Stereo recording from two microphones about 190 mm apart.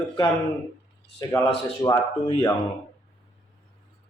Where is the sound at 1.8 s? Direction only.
20° left (ahead or behind).